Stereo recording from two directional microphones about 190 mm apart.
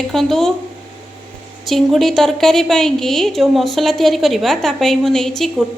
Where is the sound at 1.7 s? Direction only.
Centre (ahead or behind).